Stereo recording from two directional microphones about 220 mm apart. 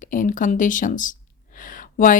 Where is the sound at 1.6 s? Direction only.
40° left (ahead or behind).